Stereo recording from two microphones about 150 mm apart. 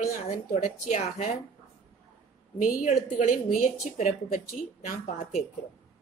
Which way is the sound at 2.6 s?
60° left (ahead or behind).